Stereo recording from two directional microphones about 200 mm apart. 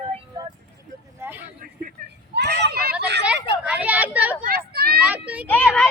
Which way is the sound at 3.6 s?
5° right (ahead or behind).